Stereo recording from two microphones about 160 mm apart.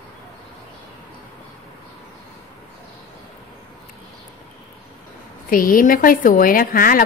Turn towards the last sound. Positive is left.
turn(degrees=60)  # may be behind; listen again after turning